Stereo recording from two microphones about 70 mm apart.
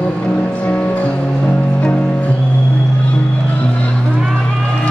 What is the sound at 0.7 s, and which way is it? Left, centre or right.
Music, left.